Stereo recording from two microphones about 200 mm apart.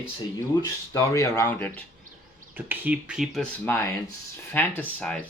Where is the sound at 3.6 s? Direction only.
10° left (ahead or behind).